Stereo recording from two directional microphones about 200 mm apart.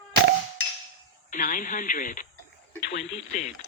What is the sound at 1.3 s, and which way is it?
Speech, 40° left (ahead or behind).